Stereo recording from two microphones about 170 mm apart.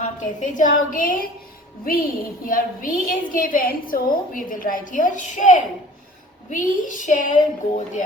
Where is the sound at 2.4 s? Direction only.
55° left (ahead or behind).